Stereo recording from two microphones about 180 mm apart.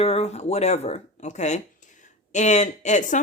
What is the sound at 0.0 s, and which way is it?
Speech, 35° left (ahead or behind).